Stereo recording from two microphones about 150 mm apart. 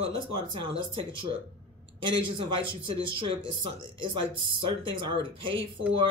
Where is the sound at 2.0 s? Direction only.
35° right (ahead or behind).